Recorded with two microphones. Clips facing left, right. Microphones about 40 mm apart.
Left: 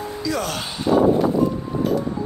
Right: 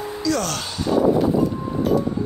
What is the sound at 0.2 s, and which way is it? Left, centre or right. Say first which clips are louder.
Speech: right 2 dB; centre.